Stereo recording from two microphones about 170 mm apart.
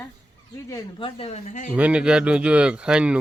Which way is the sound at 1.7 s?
5° right (ahead or behind).